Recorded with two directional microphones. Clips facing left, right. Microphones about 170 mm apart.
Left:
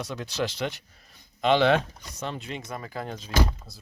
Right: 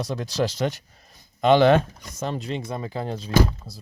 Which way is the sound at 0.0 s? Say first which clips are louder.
Right 5 dB; 35° right (ahead or behind).